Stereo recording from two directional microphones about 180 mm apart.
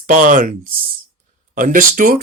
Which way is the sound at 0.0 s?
45° right (ahead or behind).